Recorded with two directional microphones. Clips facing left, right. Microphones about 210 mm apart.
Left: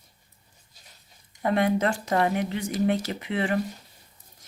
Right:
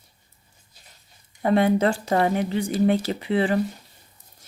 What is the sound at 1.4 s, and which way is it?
Speech, 30° right (ahead or behind).